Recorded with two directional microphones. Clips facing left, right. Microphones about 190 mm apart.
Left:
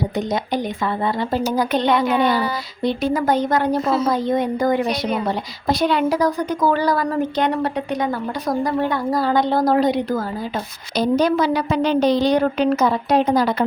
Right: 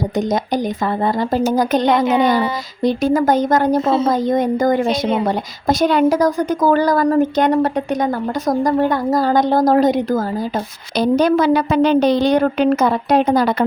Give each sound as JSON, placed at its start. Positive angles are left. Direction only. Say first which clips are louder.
{"t": 0.2, "sound": "a woman's voice", "louder": "right 5 dB", "side_deg": -45}
{"t": 2.0, "sound": "speech", "louder": "right 3 dB", "side_deg": -20}
{"t": 2.8, "sound": "a woman's voice", "louder": "right 4 dB", "side_deg": -45}
{"t": 3.8, "sound": "speech", "louder": "right 3 dB", "side_deg": -30}
{"t": 4.1, "sound": "a woman's voice", "louder": "right 3 dB", "side_deg": -45}
{"t": 4.9, "sound": "speech", "louder": "right 4 dB", "side_deg": -25}
{"t": 5.2, "sound": "a woman's voice", "louder": "right 4 dB", "side_deg": -45}
{"t": 10.9, "sound": "a woman's voice", "louder": "right 3 dB", "side_deg": -55}